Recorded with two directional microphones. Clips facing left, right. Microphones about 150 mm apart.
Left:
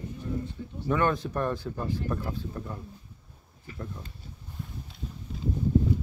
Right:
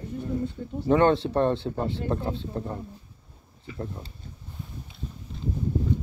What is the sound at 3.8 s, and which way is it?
Speech, 30° right (ahead or behind).